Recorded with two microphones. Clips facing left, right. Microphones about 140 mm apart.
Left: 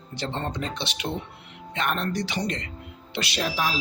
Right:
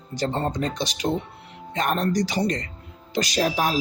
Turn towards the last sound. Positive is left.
turn(degrees=-45)  # may be behind; listen again after turning